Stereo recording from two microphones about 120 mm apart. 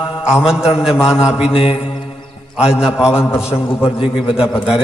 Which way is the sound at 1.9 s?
50° left (ahead or behind).